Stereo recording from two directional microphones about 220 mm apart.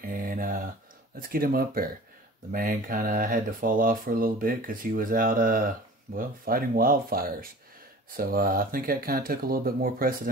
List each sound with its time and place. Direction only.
0.0 s speech: 40° right (ahead or behind)